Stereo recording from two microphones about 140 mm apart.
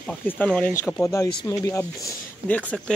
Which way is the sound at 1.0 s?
20° left (ahead or behind).